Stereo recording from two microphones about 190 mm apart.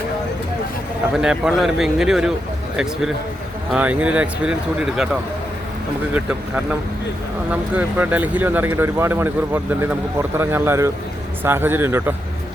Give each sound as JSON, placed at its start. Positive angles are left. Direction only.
{"t": 1.1, "sound": "speech", "side_deg": -5}
{"t": 3.7, "sound": "speech", "side_deg": -5}
{"t": 7.5, "sound": "speech", "side_deg": -10}